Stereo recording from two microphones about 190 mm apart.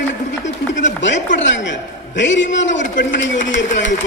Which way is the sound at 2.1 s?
75° left (ahead or behind).